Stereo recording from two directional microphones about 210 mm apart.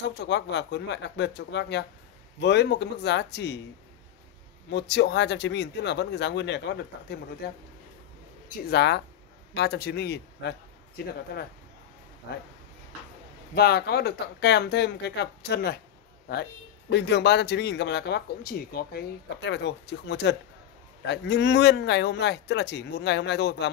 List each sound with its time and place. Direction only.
0.1 s a man's voice: 55° left (ahead or behind)
4.6 s a man's voice: 55° left (ahead or behind)
8.6 s speech: 50° left (ahead or behind)
13.6 s speech: 50° left (ahead or behind)
16.9 s a man's voice: 55° left (ahead or behind)